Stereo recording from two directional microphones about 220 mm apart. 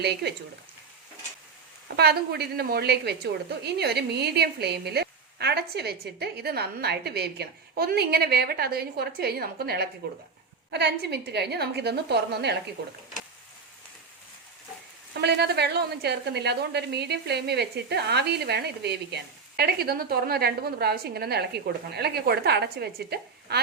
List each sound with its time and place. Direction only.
0.0 s a woman's voice: 50° right (ahead or behind)
2.0 s a woman's voice: 45° right (ahead or behind)
15.2 s a woman's voice: 50° right (ahead or behind)